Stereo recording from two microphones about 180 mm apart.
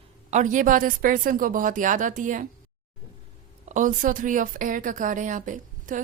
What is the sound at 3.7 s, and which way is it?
Speech, 45° right (ahead or behind).